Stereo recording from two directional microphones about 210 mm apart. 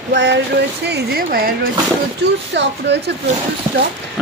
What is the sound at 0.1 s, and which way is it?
Speech, 55° right (ahead or behind).